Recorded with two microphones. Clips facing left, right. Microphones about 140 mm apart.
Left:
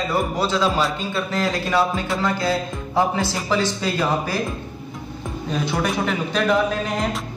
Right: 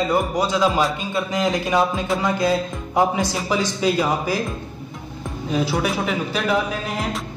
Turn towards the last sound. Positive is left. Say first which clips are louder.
# left 2 dB
turn(degrees=-5)  # may be behind; listen again after turning